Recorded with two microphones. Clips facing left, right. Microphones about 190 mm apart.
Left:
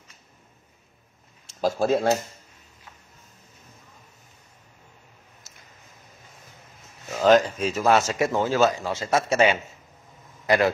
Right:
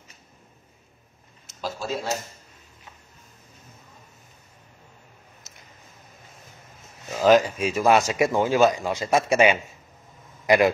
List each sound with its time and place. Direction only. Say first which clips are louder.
1.6 s speech: left 8 dB; 50° left (ahead or behind)
7.1 s a man's voice: even; 10° right (ahead or behind)